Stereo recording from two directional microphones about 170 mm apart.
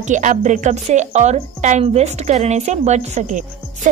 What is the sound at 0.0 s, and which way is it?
A woman's voice, 45° right (ahead or behind).